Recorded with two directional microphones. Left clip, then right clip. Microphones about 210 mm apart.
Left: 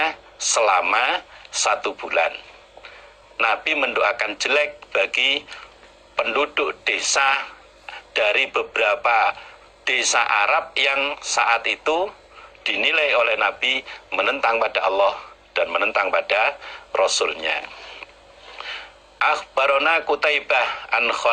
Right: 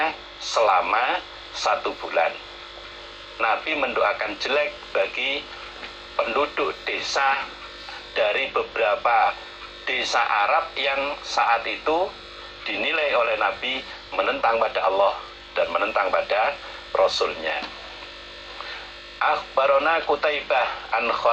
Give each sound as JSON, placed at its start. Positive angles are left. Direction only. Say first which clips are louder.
{"t": 0.0, "sound": "speech", "louder": "left 2 dB", "side_deg": 30}
{"t": 3.3, "sound": "a man's voice", "louder": "left 3 dB", "side_deg": 30}
{"t": 19.2, "sound": "a man's voice", "louder": "left 2 dB", "side_deg": 30}